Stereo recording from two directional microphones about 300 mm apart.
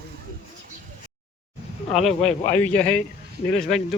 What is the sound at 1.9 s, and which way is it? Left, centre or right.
Speech, centre.